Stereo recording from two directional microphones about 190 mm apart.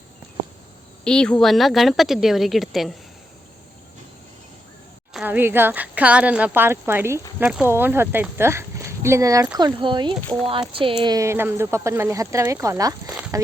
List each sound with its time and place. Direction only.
1.0 s a woman's voice: 5° left (ahead or behind)
5.1 s speech: 10° right (ahead or behind)